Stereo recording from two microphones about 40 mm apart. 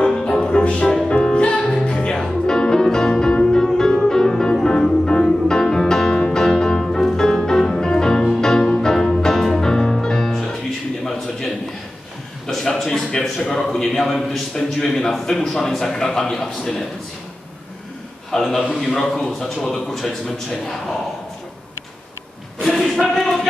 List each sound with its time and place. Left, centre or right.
0.0 s music: centre
0.4 s music: left; by 10.6 s centre
12.4 s a sound: centre
15.2 s a man's voice: centre
18.3 s a man's voice: centre
22.6 s a sound: centre